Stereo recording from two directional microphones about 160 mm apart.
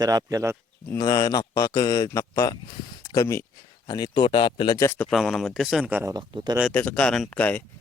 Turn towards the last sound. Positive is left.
turn(degrees=10)  # may be behind; listen again after turning